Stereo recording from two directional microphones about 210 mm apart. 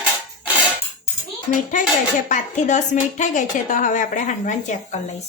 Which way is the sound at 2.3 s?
35° left (ahead or behind).